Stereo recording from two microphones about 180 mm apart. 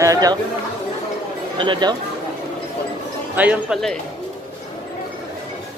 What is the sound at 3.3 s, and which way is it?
Speech, 10° right (ahead or behind).